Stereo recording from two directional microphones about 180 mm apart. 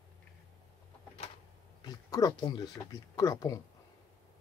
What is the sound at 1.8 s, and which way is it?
Speech, 20° left (ahead or behind).